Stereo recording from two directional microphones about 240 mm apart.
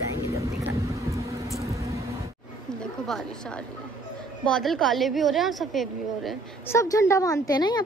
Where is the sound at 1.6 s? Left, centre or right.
Centre.